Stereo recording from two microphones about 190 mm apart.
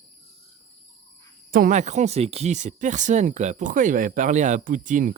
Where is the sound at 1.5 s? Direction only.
45° right (ahead or behind).